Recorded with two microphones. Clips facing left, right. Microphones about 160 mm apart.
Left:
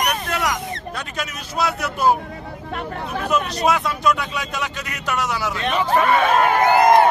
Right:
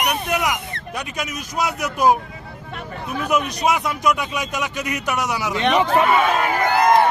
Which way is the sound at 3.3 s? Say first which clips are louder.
Even; 15° right (ahead or behind).